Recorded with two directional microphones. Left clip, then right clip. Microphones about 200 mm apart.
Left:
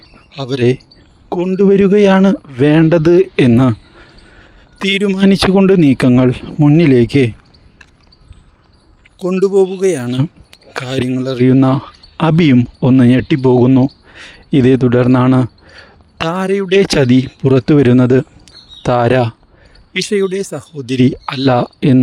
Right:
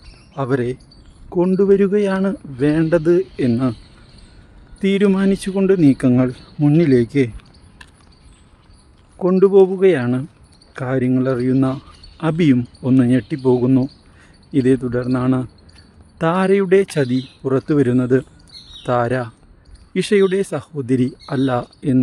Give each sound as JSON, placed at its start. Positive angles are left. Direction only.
{"t": 0.5, "sound": "speech", "side_deg": 40}
{"t": 4.9, "sound": "speech", "side_deg": 0}
{"t": 5.2, "sound": "speech", "side_deg": 45}
{"t": 9.1, "sound": "a man's voice", "side_deg": 0}
{"t": 11.1, "sound": "speech", "side_deg": 0}
{"t": 11.4, "sound": "a man's voice", "side_deg": 45}
{"t": 16.3, "sound": "speech", "side_deg": 0}
{"t": 16.6, "sound": "speech", "side_deg": 40}
{"t": 20.0, "sound": "speech", "side_deg": 0}
{"t": 20.8, "sound": "speech", "side_deg": 40}